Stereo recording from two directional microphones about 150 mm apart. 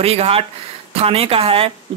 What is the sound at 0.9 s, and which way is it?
Speech, 40° right (ahead or behind).